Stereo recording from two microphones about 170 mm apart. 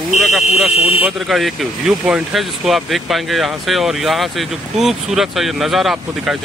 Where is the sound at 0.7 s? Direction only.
35° left (ahead or behind).